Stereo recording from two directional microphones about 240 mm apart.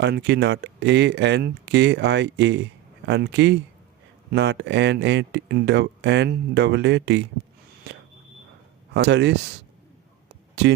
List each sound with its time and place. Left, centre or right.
0.0 s speech: right
8.9 s speech: right
10.5 s speech: right